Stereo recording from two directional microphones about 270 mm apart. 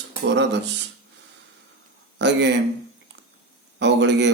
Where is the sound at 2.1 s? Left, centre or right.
Right.